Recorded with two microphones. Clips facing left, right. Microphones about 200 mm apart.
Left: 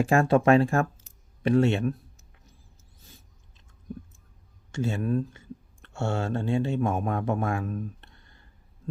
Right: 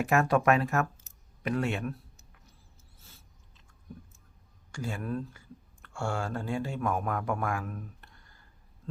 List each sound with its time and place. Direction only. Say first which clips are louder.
0.0 s speech: left 4 dB; 30° left (ahead or behind)
3.0 s a sound: left 5 dB; 15° left (ahead or behind)
4.7 s speech: left 7 dB; 25° left (ahead or behind)